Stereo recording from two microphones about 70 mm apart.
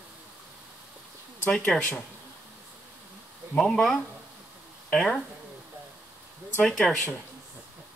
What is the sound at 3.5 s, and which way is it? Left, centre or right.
Speech, centre.